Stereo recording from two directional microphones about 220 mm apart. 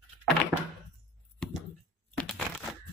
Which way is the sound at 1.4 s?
5° left (ahead or behind).